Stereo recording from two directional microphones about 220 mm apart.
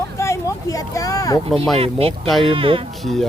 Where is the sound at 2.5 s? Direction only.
25° right (ahead or behind).